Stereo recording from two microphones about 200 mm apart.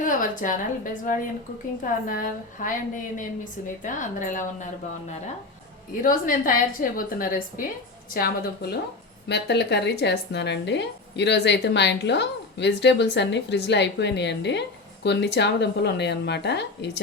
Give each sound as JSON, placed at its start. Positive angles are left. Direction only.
{"t": 0.0, "sound": "a woman's voice", "side_deg": 40}
{"t": 6.0, "sound": "a woman's voice", "side_deg": 45}